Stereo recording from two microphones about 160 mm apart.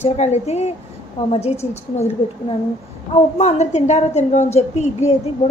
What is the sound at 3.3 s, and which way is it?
A woman's voice, 45° left (ahead or behind).